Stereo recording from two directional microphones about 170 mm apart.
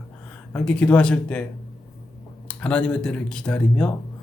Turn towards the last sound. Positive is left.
turn(degrees=5)  # may be behind; listen again after turning